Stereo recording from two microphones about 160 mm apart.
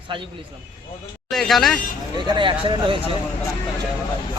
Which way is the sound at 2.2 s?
30° right (ahead or behind).